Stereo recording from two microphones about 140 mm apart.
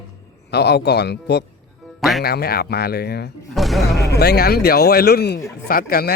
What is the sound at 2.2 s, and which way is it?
Speech, 90° left.